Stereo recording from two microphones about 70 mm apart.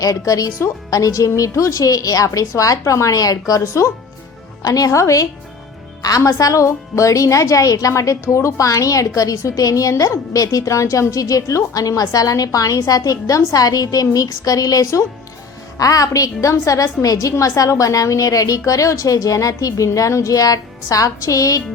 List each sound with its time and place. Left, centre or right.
0.0 s a woman's voice: left
4.6 s a woman's voice: left